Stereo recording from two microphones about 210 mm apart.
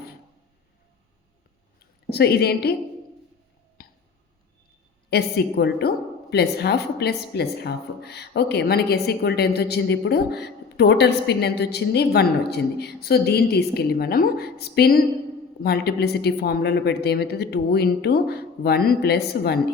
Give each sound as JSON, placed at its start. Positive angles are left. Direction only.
{"t": 2.0, "sound": "speech", "side_deg": 50}
{"t": 3.8, "sound": "tick", "side_deg": 45}
{"t": 5.1, "sound": "speech", "side_deg": 50}